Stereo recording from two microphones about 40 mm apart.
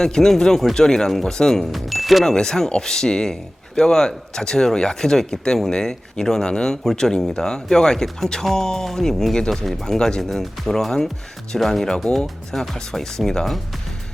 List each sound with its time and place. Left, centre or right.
0.0 s speech: centre
1.7 s speech: centre
2.2 s speech: centre